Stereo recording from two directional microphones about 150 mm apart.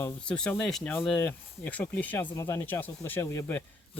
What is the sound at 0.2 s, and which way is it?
Speech, 5° left (ahead or behind).